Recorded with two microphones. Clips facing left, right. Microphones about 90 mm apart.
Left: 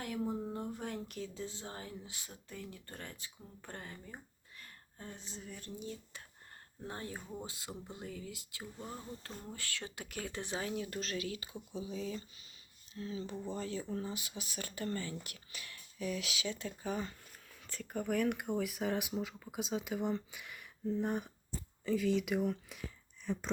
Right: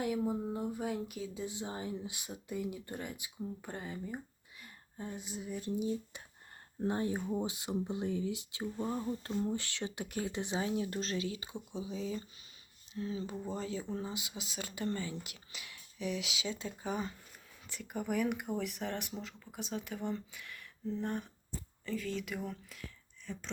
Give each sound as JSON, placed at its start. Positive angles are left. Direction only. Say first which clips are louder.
{"t": 0.0, "sound": "speech", "louder": "right 4 dB", "side_deg": -10}
{"t": 13.3, "sound": "speech", "louder": "right 1 dB", "side_deg": -5}
{"t": 13.9, "sound": "speech", "louder": "even", "side_deg": -20}